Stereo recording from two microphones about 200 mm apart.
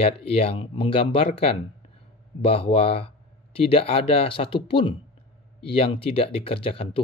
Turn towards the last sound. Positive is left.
turn(degrees=25)  # may be behind; listen again after turning